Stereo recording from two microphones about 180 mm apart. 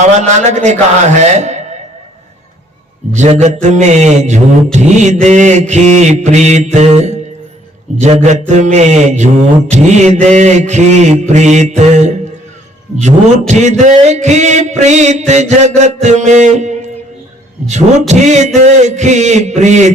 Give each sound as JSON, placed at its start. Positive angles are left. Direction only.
{"t": 0.2, "sound": "mantra", "side_deg": -40}
{"t": 3.2, "sound": "mantra", "side_deg": -40}
{"t": 13.5, "sound": "mantra", "side_deg": -40}
{"t": 18.1, "sound": "mantra", "side_deg": -40}